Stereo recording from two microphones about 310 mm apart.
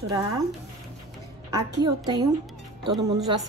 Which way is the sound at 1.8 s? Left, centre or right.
Centre.